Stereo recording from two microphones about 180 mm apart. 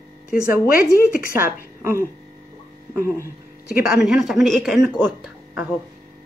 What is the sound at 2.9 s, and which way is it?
Speech, 15° right (ahead or behind).